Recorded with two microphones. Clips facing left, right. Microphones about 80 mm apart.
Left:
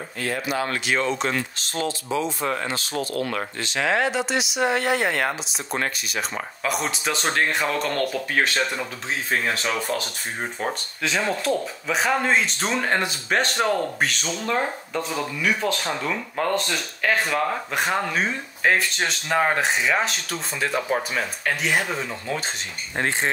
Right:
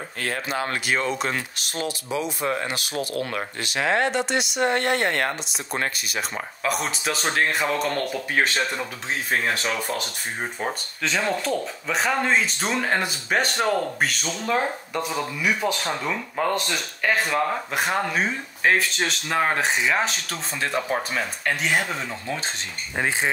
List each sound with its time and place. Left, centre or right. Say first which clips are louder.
0.5 s speech: left 2 dB; right
0.8 s speech: left 1 dB; centre